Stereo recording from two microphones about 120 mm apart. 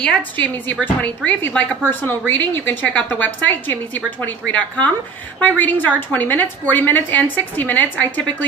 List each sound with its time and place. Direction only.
0.0 s a woman's voice: 10° left (ahead or behind)